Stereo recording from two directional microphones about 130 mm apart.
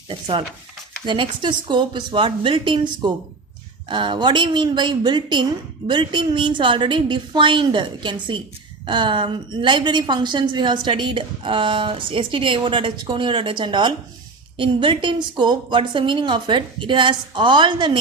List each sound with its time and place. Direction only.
0.1 s a woman's voice: 40° right (ahead or behind)